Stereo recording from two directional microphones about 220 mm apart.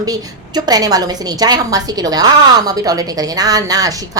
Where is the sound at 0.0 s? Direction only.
15° right (ahead or behind).